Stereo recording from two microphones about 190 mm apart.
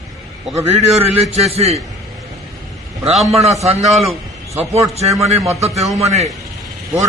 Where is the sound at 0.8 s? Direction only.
35° right (ahead or behind).